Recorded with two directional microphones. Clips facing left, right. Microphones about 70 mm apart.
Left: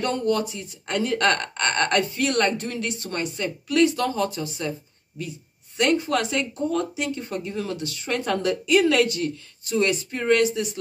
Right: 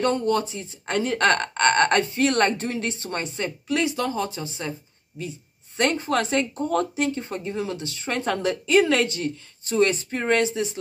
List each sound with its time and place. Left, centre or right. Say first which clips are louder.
0.0 s speech: right 1 dB; right